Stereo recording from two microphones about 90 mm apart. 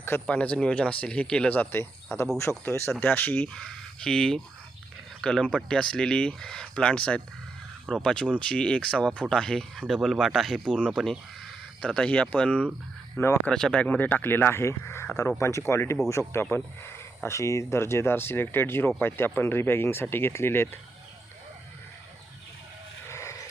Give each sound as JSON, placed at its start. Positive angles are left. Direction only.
{"t": 0.0, "sound": "speech", "side_deg": 25}
{"t": 0.3, "sound": "speech", "side_deg": 15}
{"t": 13.1, "sound": "speech", "side_deg": 30}
{"t": 13.5, "sound": "speech", "side_deg": 5}
{"t": 13.8, "sound": "speech", "side_deg": 20}
{"t": 23.0, "sound": "a sound", "side_deg": 30}